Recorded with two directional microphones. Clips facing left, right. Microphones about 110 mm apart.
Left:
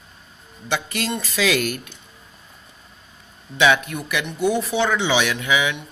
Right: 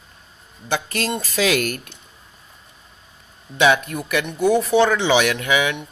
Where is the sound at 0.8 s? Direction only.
45° right (ahead or behind).